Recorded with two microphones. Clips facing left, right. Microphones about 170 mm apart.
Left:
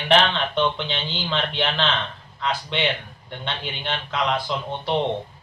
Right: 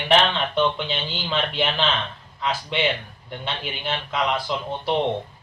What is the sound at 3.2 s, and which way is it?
A man's voice, 5° right (ahead or behind).